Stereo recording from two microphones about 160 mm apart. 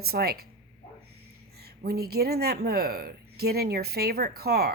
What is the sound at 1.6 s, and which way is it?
Speech, 75° right (ahead or behind).